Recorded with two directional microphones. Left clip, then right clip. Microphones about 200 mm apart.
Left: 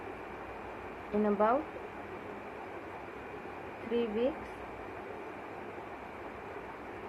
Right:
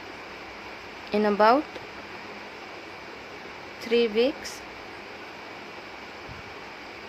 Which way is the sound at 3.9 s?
60° right (ahead or behind).